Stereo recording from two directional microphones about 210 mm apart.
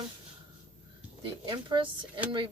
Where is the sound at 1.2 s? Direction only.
25° right (ahead or behind).